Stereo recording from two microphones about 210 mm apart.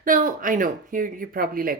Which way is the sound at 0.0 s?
40° right (ahead or behind).